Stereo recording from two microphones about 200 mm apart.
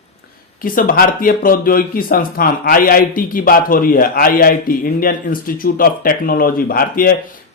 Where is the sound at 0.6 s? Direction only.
45° left (ahead or behind).